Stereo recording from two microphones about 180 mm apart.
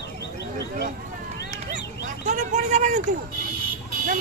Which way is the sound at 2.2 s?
40° right (ahead or behind).